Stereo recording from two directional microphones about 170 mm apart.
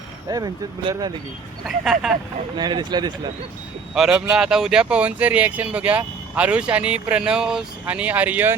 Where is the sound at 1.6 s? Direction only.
5° right (ahead or behind).